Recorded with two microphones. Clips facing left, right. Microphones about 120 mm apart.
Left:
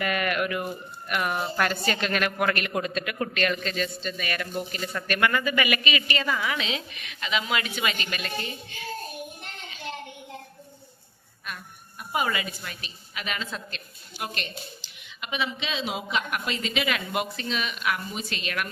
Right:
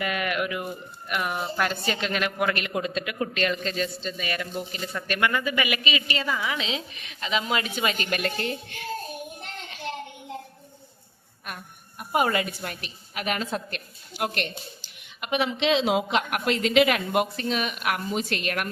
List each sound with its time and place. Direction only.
0.0 s a sound: 15° right (ahead or behind)
1.0 s a woman's voice: 15° right (ahead or behind); by 8.0 s 40° right (ahead or behind)
8.1 s a woman's voice: 65° right (ahead or behind)
11.4 s a woman's voice: 50° right (ahead or behind)